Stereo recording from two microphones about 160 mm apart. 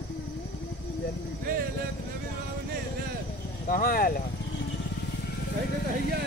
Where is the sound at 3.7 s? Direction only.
65° left (ahead or behind).